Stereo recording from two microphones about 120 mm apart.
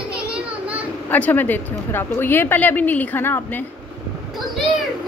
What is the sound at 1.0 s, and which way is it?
A woman's voice, 15° left (ahead or behind).